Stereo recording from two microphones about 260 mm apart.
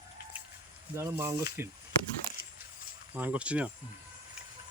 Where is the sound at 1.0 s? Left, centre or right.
Centre.